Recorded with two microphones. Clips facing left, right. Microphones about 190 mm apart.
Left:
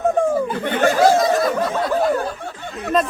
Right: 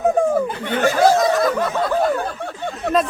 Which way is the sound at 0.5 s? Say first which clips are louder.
Left 1 dB; 50° left (ahead or behind).